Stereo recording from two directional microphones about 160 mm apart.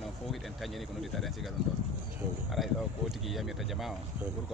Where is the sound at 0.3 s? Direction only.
Centre (ahead or behind).